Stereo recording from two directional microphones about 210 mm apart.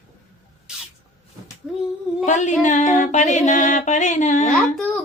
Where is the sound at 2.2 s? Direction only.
35° left (ahead or behind).